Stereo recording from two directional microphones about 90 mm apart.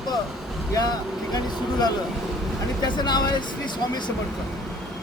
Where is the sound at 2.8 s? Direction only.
50° left (ahead or behind).